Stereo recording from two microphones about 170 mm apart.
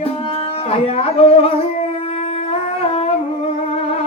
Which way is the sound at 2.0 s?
35° left (ahead or behind).